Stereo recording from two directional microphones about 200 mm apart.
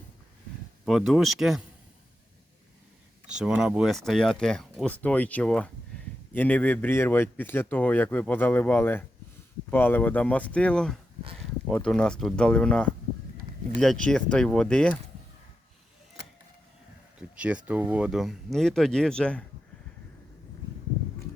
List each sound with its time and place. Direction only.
0.9 s speech: centre (ahead or behind)
3.4 s speech: 5° right (ahead or behind)
17.2 s speech: 5° right (ahead or behind)